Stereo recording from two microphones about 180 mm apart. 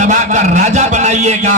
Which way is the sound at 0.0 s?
45° right (ahead or behind).